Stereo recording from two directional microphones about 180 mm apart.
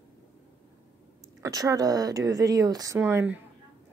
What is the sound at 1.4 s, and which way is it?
Speech, 20° right (ahead or behind).